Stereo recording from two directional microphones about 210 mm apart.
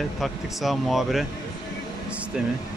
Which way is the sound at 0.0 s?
Centre (ahead or behind).